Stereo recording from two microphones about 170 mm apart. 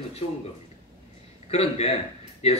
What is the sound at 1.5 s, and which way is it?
A man's voice, 35° left (ahead or behind).